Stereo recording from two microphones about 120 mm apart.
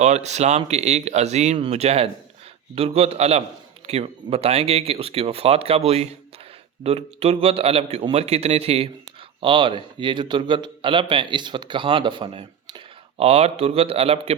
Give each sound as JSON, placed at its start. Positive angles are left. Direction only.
{"t": 0.0, "sound": "speech", "side_deg": -70}
{"t": 1.5, "sound": "speech", "side_deg": -55}
{"t": 9.4, "sound": "a man's voice", "side_deg": -45}